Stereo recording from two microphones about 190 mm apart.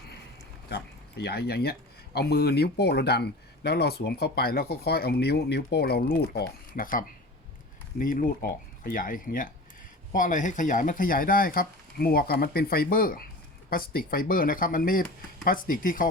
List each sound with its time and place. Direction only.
0.7 s speech: 60° left (ahead or behind)